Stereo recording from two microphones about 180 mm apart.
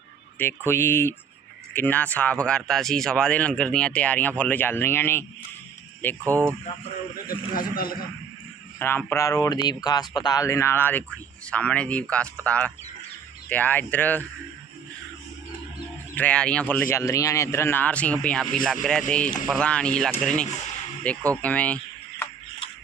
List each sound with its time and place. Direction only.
0.3 s speech: 10° left (ahead or behind)
7.3 s a man's voice: 55° left (ahead or behind)
8.8 s speech: 10° left (ahead or behind)
16.1 s speech: 5° left (ahead or behind)